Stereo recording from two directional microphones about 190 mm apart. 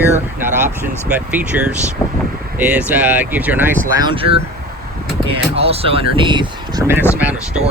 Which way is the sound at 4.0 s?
25° right (ahead or behind).